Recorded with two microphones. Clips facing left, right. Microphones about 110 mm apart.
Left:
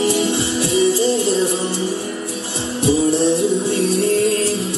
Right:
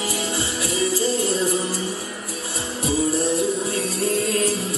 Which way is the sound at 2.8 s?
30° left (ahead or behind).